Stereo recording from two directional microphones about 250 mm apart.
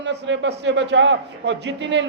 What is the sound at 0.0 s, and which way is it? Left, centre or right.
A man's voice, right.